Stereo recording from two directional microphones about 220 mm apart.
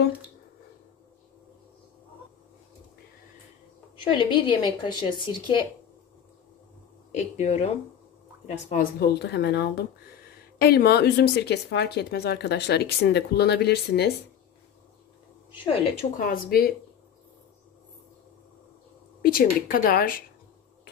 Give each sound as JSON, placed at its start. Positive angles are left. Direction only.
{"t": 4.0, "sound": "speech", "side_deg": 20}
{"t": 7.2, "sound": "speech", "side_deg": 30}
{"t": 9.2, "sound": "speech", "side_deg": 50}
{"t": 15.6, "sound": "speech", "side_deg": 25}
{"t": 16.4, "sound": "speech", "side_deg": 40}
{"t": 19.2, "sound": "speech", "side_deg": 40}